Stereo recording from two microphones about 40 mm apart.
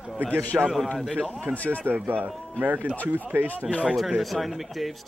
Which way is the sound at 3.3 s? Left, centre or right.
Right.